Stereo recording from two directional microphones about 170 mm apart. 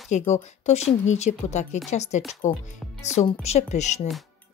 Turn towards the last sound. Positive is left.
turn(degrees=45)  # may be behind; listen again after turning